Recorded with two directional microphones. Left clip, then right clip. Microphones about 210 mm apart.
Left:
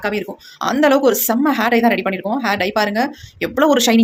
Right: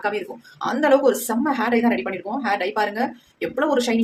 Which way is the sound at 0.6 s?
45° left (ahead or behind).